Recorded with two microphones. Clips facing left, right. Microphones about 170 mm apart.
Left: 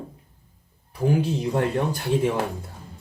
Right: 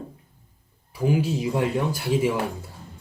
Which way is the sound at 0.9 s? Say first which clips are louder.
Even; 5° right (ahead or behind).